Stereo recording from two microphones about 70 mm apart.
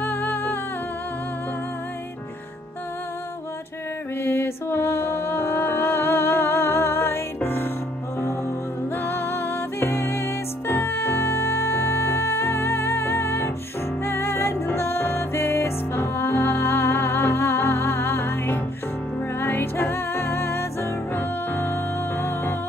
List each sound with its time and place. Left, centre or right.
0.0 s music: left
4.2 s music: left
8.9 s music: left